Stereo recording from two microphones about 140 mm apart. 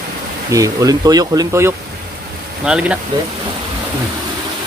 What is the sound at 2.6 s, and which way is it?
Speech, 5° right (ahead or behind).